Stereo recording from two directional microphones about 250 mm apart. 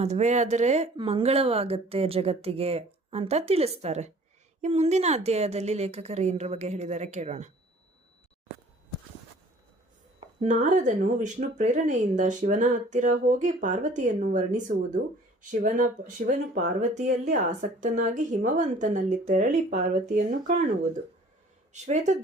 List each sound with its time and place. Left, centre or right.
0.0 s speech: right
10.2 s speech: right
21.7 s speech: right